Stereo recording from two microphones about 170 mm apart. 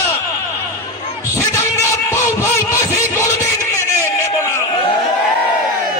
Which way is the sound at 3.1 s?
15° left (ahead or behind).